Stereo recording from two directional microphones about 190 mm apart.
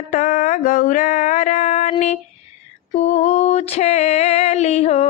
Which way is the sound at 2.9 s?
35° left (ahead or behind).